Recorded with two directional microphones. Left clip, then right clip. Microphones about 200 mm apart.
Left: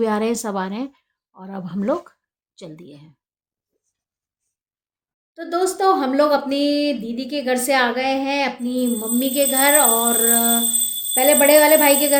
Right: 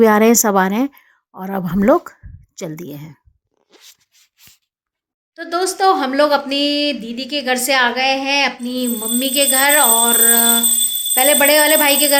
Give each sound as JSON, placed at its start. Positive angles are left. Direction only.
{"t": 0.0, "sound": "a woman's voice", "side_deg": -55}
{"t": 5.3, "sound": "speech", "side_deg": 5}